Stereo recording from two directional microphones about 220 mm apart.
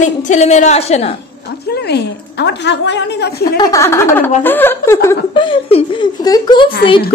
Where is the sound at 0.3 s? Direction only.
30° left (ahead or behind).